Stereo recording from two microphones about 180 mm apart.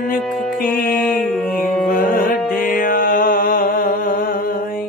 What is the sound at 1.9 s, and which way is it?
Music, 55° left (ahead or behind).